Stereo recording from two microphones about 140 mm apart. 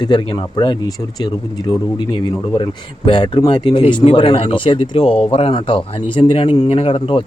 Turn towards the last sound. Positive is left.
turn(degrees=40)  # may be behind; listen again after turning